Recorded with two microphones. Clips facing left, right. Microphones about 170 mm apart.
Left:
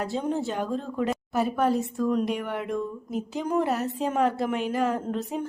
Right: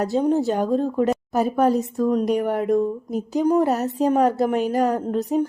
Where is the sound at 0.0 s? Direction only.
40° right (ahead or behind).